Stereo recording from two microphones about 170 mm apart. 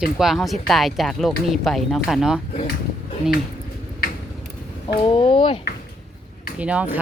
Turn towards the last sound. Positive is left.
turn(degrees=-10)  # may be behind; listen again after turning